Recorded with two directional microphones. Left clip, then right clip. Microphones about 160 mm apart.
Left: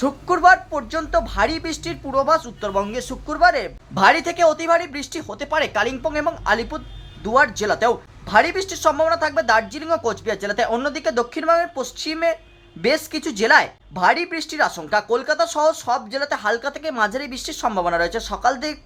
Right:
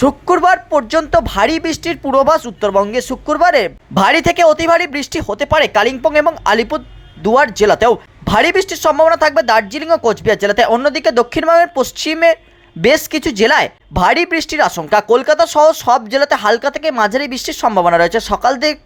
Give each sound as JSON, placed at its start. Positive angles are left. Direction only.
{"t": 0.0, "sound": "speech", "side_deg": -40}